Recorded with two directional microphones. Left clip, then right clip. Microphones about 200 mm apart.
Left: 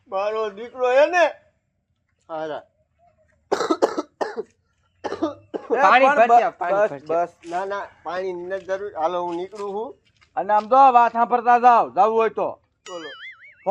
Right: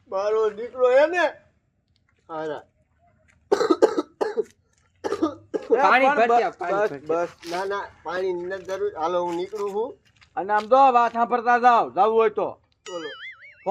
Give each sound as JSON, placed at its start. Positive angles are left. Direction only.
{"t": 0.1, "sound": "speech", "side_deg": -35}
{"t": 3.5, "sound": "cough", "side_deg": -30}
{"t": 5.6, "sound": "a man's voice", "side_deg": -20}
{"t": 12.8, "sound": "boing", "side_deg": 0}